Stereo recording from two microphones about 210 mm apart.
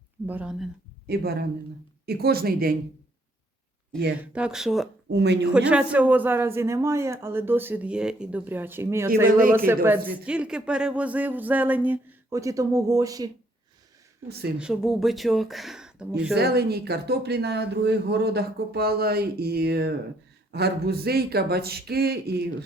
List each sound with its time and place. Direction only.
0.3 s speech: 5° right (ahead or behind)
1.0 s speech: 50° right (ahead or behind)
3.9 s speech: 5° left (ahead or behind)
5.1 s a woman's voice: 55° right (ahead or behind)
5.5 s a man's voice: 5° right (ahead or behind)
14.3 s speech: 50° right (ahead or behind)
14.6 s speech: centre (ahead or behind)
16.3 s speech: 50° right (ahead or behind)